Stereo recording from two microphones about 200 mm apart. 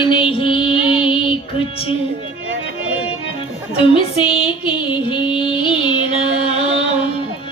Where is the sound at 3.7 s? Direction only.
25° left (ahead or behind).